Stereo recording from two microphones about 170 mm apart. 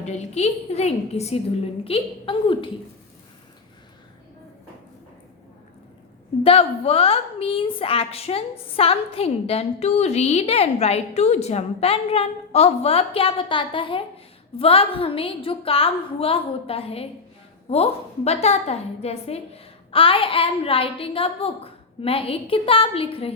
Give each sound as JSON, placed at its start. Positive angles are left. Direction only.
{"t": 0.0, "sound": "a woman's voice", "side_deg": 40}
{"t": 6.4, "sound": "a woman's voice", "side_deg": 35}